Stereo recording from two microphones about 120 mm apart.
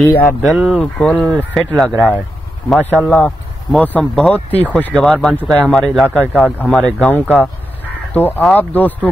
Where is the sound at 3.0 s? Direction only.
5° left (ahead or behind).